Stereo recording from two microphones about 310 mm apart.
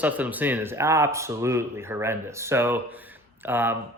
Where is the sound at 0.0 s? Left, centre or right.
Centre.